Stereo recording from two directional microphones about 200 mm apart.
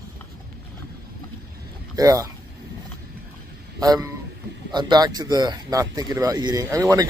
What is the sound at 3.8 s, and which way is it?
Speech, 15° right (ahead or behind).